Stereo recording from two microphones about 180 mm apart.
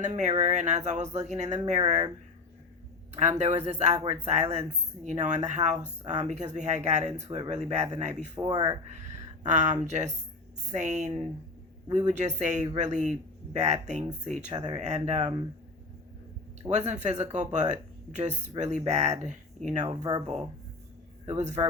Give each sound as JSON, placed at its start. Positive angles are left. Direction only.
{"t": 0.0, "sound": "speech", "side_deg": -40}
{"t": 3.2, "sound": "speech", "side_deg": -40}
{"t": 8.4, "sound": "speech", "side_deg": -25}
{"t": 9.0, "sound": "speech", "side_deg": -40}
{"t": 16.6, "sound": "speech", "side_deg": -40}
{"t": 20.0, "sound": "speech", "side_deg": -20}
{"t": 21.2, "sound": "speech", "side_deg": -40}